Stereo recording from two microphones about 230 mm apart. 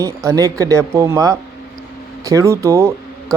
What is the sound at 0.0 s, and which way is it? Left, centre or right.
Speech, centre.